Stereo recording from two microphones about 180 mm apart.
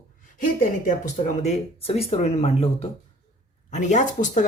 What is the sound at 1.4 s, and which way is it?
Speech, 35° left (ahead or behind).